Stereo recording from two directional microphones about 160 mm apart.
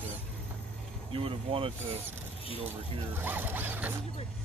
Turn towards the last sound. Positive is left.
turn(degrees=-10)  # may be behind; listen again after turning